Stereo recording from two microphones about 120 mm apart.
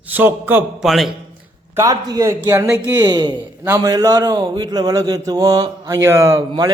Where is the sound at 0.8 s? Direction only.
Centre (ahead or behind).